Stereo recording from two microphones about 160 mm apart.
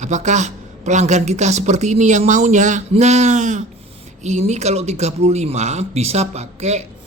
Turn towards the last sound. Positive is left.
turn(degrees=-45)  # may be behind; listen again after turning